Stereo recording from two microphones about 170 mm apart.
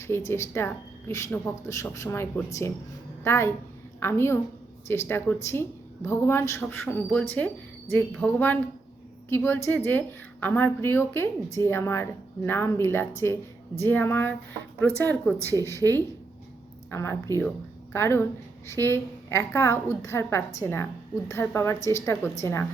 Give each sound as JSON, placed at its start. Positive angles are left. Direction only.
{"t": 0.0, "sound": "a woman's voice", "side_deg": 15}
{"t": 15.4, "sound": "speech", "side_deg": -20}
{"t": 16.9, "sound": "a woman's voice", "side_deg": 15}